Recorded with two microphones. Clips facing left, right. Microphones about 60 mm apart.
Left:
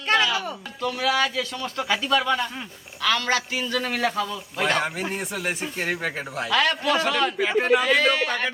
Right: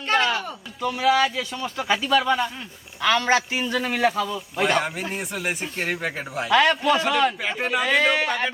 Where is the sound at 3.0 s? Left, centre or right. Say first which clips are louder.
Right 3 dB; right.